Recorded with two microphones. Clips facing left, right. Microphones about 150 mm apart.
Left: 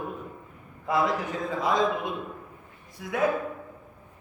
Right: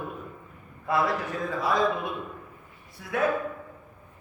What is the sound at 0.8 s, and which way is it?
A man's voice, 15° left (ahead or behind).